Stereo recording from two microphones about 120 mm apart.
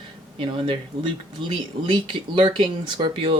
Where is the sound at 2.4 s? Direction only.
40° right (ahead or behind).